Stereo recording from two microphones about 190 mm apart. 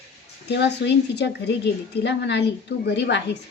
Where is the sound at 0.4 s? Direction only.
65° left (ahead or behind).